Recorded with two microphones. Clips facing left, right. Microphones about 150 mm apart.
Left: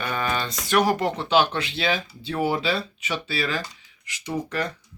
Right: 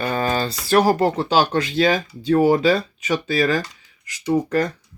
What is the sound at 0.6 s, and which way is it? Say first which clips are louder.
Speech: right 5 dB; 35° right (ahead or behind).